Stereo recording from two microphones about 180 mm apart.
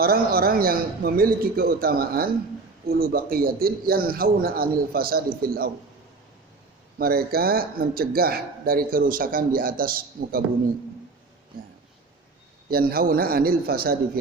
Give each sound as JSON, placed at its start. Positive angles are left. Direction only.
{"t": 0.0, "sound": "speech", "side_deg": -55}
{"t": 7.0, "sound": "speech", "side_deg": -55}
{"t": 12.7, "sound": "speech", "side_deg": -55}